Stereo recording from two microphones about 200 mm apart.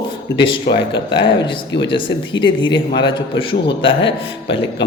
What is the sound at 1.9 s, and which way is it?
A man's voice, 25° left (ahead or behind).